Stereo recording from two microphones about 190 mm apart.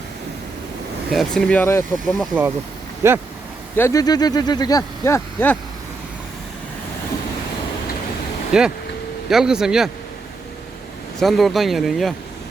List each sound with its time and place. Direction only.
1.1 s speech: centre (ahead or behind)
2.0 s speech: centre (ahead or behind)
3.0 s speech: 15° right (ahead or behind)
3.8 s speech: 15° left (ahead or behind)
8.5 s speech: 5° right (ahead or behind)
11.2 s speech: centre (ahead or behind)